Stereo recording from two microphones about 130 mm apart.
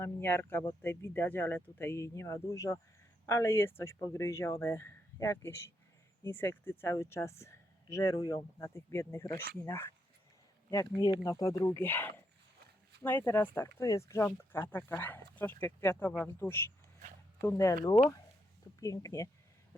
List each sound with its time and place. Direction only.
0.0 s speech: 20° left (ahead or behind)
18.8 s speech: 25° left (ahead or behind)